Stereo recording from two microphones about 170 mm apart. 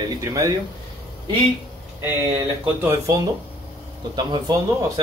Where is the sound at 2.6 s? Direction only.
15° right (ahead or behind).